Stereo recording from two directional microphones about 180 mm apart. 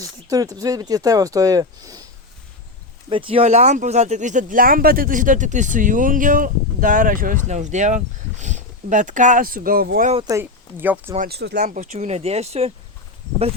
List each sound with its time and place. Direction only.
0.0 s speech: 20° right (ahead or behind)
3.1 s speech: 30° right (ahead or behind); by 10.1 s 55° right (ahead or behind)
10.2 s speech: 15° right (ahead or behind)
11.2 s speech: 65° right (ahead or behind)
11.6 s speech: 45° right (ahead or behind)